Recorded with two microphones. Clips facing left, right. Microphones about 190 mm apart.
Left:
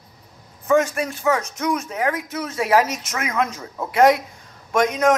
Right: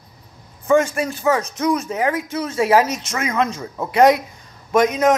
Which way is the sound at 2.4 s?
Centre (ahead or behind).